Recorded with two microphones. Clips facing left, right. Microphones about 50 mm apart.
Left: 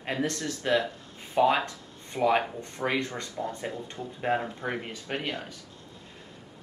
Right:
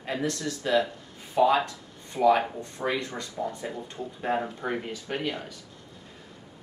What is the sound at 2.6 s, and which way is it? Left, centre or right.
Speech, left.